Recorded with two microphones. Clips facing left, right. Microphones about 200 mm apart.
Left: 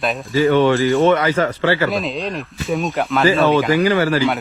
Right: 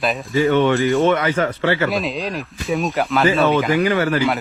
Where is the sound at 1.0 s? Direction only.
30° left (ahead or behind).